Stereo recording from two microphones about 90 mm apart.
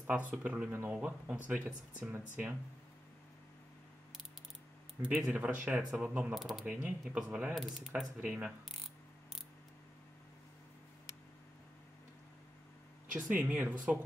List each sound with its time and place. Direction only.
0.3 s speech: 15° right (ahead or behind)
0.7 s speech: 25° right (ahead or behind)
0.9 s speech: 15° right (ahead or behind)
5.0 s speech: 15° right (ahead or behind)
6.3 s speech: centre (ahead or behind)
6.6 s speech: 15° right (ahead or behind)
7.5 s speech: centre (ahead or behind)
8.2 s speech: 10° right (ahead or behind)
13.1 s speech: 20° right (ahead or behind)